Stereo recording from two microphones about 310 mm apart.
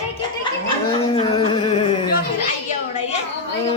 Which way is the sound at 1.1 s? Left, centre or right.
Centre.